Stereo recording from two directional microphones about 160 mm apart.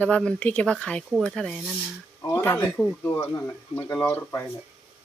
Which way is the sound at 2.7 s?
5° left (ahead or behind).